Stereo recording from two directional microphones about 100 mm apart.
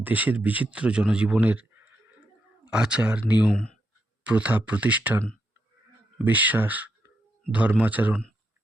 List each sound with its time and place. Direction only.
0.0 s speech: 15° right (ahead or behind)
6.2 s speech: 15° right (ahead or behind)